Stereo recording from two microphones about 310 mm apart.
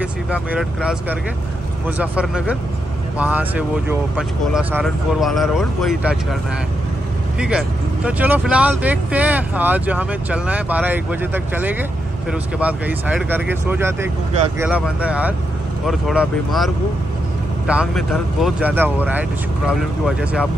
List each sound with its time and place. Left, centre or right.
0.0 s speech: centre
7.3 s speech: centre